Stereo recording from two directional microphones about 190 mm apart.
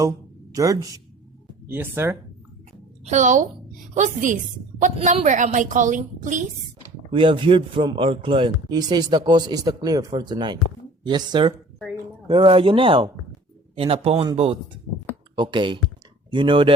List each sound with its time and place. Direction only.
0.5 s speech: 20° right (ahead or behind)
3.1 s a woman's voice: 40° right (ahead or behind)
7.1 s speech: 25° right (ahead or behind)